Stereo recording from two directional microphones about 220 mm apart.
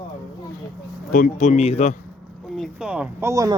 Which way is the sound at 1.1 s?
35° left (ahead or behind).